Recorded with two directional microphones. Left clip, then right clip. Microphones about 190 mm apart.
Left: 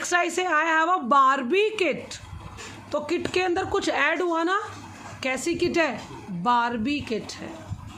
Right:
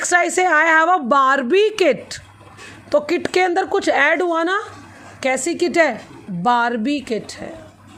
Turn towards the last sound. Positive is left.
turn(degrees=-35)  # may be behind; listen again after turning